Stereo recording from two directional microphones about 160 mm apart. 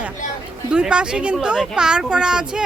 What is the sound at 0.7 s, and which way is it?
Speech, 5° right (ahead or behind).